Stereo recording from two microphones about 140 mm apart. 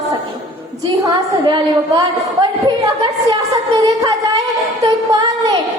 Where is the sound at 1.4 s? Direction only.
30° right (ahead or behind).